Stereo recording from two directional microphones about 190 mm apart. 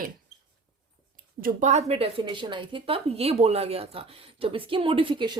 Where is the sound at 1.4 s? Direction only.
45° right (ahead or behind).